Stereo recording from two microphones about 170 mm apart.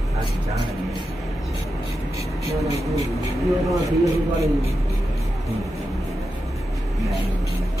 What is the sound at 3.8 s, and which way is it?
Speech, 20° right (ahead or behind).